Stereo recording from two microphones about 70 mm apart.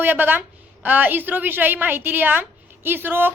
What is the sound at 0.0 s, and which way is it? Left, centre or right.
A woman's voice, right.